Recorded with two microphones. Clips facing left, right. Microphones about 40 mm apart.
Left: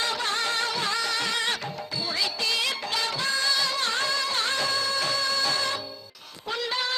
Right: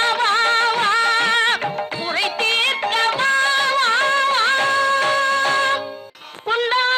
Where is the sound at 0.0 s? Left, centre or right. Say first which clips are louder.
Right 10 dB; right.